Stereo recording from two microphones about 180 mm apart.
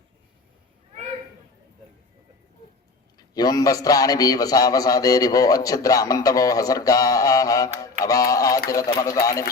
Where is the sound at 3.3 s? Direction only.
20° left (ahead or behind).